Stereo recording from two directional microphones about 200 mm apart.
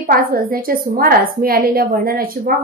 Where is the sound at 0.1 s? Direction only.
45° right (ahead or behind).